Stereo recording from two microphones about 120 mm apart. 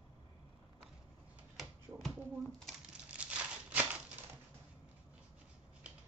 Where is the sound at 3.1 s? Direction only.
10° right (ahead or behind).